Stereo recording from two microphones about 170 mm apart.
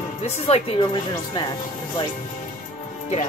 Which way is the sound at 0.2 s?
35° left (ahead or behind).